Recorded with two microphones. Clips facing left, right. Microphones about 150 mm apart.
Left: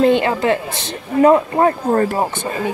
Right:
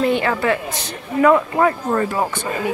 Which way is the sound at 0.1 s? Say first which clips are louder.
Left 3 dB; 20° left (ahead or behind).